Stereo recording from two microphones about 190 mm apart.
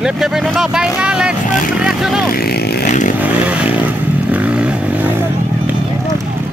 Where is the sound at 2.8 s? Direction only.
40° left (ahead or behind).